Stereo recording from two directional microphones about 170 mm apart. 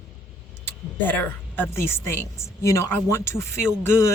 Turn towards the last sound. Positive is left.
turn(degrees=15)  # may be behind; listen again after turning